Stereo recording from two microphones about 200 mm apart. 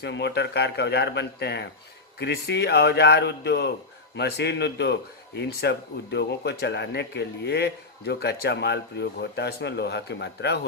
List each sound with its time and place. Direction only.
0.0 s speech: 60° left (ahead or behind)